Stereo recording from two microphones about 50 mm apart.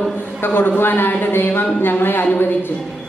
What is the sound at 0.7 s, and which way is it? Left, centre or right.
Speech, left.